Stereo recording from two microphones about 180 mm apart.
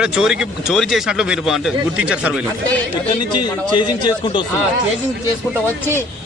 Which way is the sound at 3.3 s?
25° left (ahead or behind).